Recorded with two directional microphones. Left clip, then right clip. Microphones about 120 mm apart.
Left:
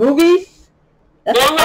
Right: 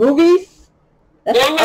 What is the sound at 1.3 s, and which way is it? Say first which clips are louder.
Speech: left 1 dB; 25° right (ahead or behind).